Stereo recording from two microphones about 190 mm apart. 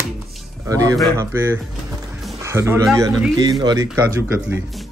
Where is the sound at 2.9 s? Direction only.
15° right (ahead or behind).